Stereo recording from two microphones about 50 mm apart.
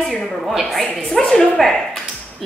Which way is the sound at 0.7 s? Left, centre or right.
Left.